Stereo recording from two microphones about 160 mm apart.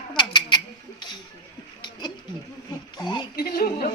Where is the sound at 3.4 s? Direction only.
75° left (ahead or behind).